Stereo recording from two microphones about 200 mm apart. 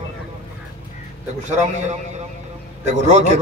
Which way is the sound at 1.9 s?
35° right (ahead or behind).